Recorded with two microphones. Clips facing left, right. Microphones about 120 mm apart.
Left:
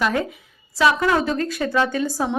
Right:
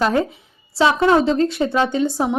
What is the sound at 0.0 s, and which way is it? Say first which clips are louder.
A woman's voice: right 4 dB; 30° right (ahead or behind).